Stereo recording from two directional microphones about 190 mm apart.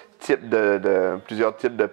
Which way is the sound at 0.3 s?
15° right (ahead or behind).